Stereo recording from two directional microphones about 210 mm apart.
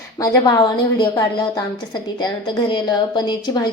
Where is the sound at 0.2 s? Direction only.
20° left (ahead or behind).